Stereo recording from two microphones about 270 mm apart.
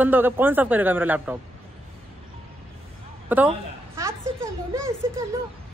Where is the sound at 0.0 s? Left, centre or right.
Centre.